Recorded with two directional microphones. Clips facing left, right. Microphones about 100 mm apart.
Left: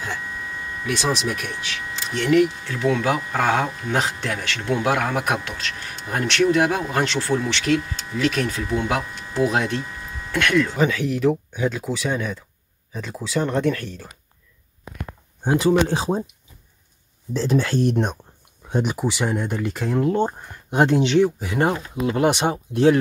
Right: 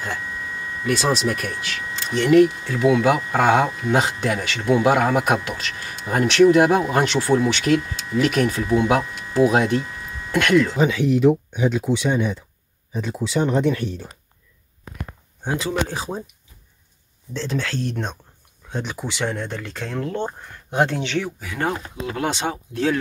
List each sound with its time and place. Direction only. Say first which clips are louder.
1.0 s speech: right 1 dB; 5° left (ahead or behind)
2.6 s speech: right 4 dB; 10° right (ahead or behind)
15.9 s speech: left 6 dB; 25° left (ahead or behind)
17.3 s speech: left 5 dB; 10° left (ahead or behind)